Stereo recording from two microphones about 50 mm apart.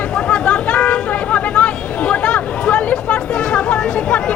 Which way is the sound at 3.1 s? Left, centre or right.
Centre.